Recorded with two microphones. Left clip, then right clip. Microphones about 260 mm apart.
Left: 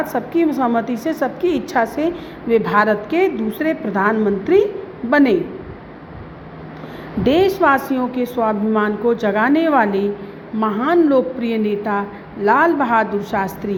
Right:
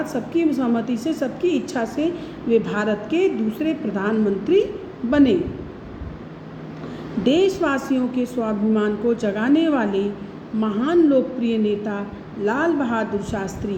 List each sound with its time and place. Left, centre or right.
0.0 s a woman's voice: centre
7.3 s a woman's voice: centre